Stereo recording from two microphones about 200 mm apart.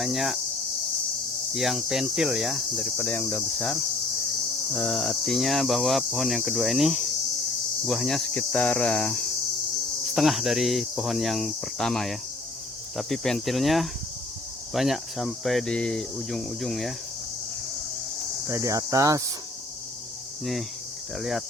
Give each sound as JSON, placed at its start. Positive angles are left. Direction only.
{"t": 0.0, "sound": "speech", "side_deg": 0}
{"t": 1.5, "sound": "speech", "side_deg": 0}
{"t": 18.4, "sound": "cricket", "side_deg": -15}
{"t": 20.4, "sound": "speech", "side_deg": 0}